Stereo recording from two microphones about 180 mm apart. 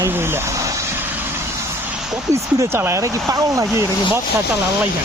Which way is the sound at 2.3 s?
15° right (ahead or behind).